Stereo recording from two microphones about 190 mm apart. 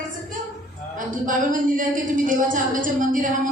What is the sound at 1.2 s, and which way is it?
A woman's voice, 45° right (ahead or behind).